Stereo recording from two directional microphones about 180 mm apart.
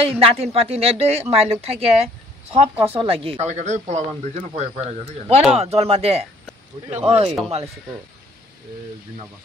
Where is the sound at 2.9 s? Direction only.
30° right (ahead or behind).